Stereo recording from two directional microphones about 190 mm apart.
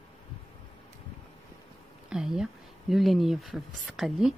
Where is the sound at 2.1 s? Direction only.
5° right (ahead or behind).